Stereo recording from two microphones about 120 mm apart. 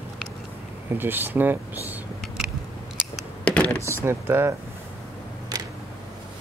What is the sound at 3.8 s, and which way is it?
Speech, 20° right (ahead or behind).